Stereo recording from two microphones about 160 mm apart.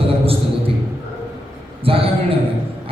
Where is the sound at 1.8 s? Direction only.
35° right (ahead or behind).